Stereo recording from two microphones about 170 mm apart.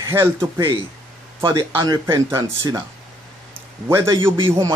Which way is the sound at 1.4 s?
25° right (ahead or behind).